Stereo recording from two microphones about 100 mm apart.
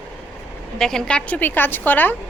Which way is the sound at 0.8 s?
5° left (ahead or behind).